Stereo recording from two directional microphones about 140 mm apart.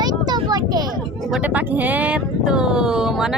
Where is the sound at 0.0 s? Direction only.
30° right (ahead or behind).